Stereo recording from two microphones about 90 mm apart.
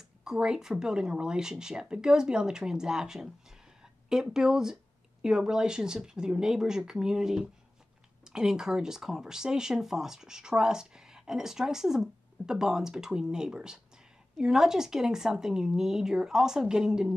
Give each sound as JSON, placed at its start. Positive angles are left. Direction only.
{"t": 0.2, "sound": "speech", "side_deg": -5}